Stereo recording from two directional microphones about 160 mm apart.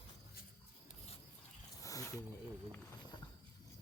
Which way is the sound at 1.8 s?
20° left (ahead or behind).